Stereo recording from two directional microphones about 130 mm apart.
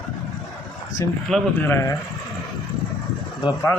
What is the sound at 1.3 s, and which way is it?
Speech, 5° left (ahead or behind).